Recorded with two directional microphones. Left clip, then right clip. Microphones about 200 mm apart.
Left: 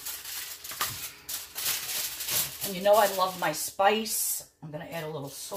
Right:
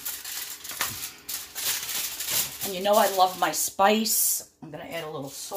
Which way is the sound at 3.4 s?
50° right (ahead or behind).